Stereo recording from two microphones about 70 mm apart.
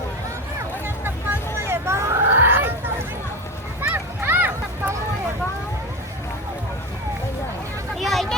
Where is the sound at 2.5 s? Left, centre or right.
Right.